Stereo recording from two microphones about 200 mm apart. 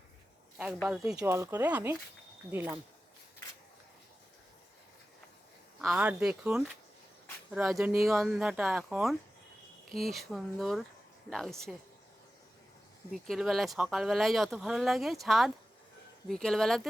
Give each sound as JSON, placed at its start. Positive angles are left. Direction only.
{"t": 0.6, "sound": "speech", "side_deg": 0}
{"t": 1.2, "sound": "speech", "side_deg": -15}
{"t": 5.8, "sound": "speech", "side_deg": -5}
{"t": 13.1, "sound": "speech", "side_deg": 0}